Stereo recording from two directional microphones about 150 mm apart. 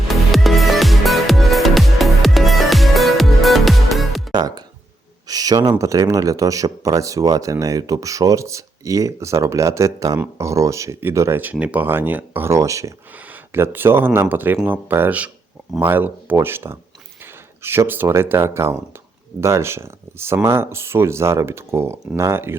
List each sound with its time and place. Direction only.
0.1 s music: centre (ahead or behind)
4.3 s music: 25° right (ahead or behind)
5.3 s a sound: 25° right (ahead or behind)
5.7 s speech: 20° right (ahead or behind)